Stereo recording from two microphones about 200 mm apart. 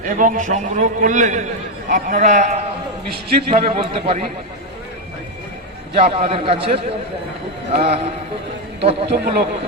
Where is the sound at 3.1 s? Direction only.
50° right (ahead or behind).